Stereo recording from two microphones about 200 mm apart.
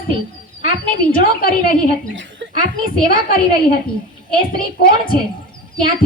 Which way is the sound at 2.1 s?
65° right (ahead or behind).